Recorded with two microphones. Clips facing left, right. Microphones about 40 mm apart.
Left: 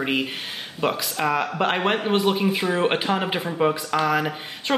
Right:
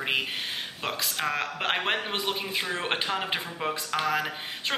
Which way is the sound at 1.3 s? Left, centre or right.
Centre.